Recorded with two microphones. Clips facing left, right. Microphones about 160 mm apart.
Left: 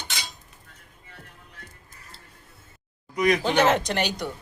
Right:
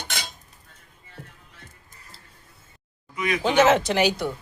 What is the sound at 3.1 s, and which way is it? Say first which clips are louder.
Speech: left 5 dB; 40° left (ahead or behind).